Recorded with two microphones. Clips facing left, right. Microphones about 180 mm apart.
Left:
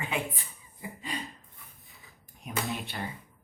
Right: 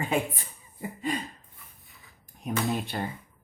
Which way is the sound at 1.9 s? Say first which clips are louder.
Even; centre (ahead or behind).